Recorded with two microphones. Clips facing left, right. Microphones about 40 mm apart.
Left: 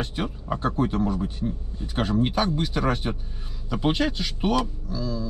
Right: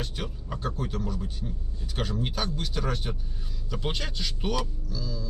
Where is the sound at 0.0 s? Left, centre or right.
Centre.